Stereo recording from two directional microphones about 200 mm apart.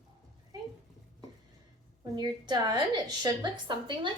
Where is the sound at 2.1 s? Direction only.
20° right (ahead or behind).